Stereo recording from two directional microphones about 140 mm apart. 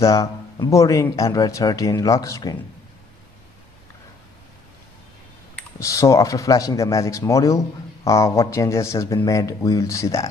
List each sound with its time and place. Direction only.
0.0 s speech: 25° left (ahead or behind)
5.8 s speech: 25° left (ahead or behind)